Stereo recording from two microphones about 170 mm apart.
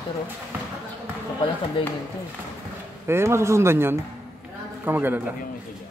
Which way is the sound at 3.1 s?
15° right (ahead or behind).